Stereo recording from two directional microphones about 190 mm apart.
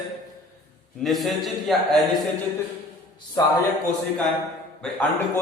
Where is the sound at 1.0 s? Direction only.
Centre (ahead or behind).